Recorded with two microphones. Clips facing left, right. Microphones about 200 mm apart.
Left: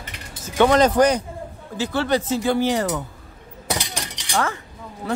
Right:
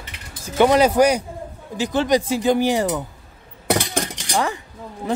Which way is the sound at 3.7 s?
50° right (ahead or behind).